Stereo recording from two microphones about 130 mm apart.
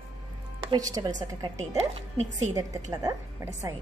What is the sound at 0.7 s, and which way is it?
A woman's voice, 30° right (ahead or behind).